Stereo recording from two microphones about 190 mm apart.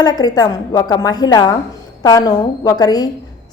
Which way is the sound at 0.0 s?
20° left (ahead or behind).